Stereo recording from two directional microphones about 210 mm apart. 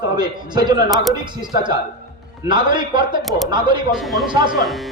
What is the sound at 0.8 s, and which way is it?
Speech, centre (ahead or behind).